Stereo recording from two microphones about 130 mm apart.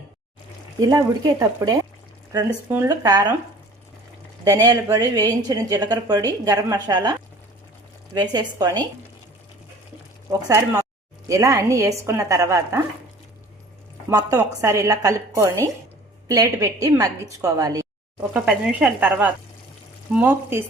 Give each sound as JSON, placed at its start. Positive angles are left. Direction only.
{"t": 0.8, "sound": "speech", "side_deg": -25}
{"t": 2.6, "sound": "speech", "side_deg": -15}
{"t": 2.9, "sound": "speech", "side_deg": -30}
{"t": 4.4, "sound": "a woman's voice", "side_deg": -30}
{"t": 10.2, "sound": "speech", "side_deg": -25}
{"t": 14.1, "sound": "speech", "side_deg": -30}
{"t": 18.2, "sound": "speech", "side_deg": -5}